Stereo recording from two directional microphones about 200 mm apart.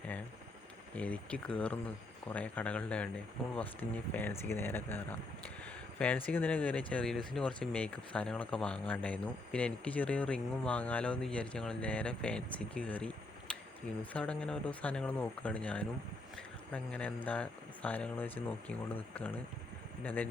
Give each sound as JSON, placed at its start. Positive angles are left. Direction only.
{"t": 0.9, "sound": "speech", "side_deg": 5}